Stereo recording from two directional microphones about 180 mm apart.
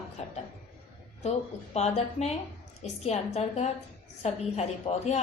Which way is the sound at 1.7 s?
35° left (ahead or behind).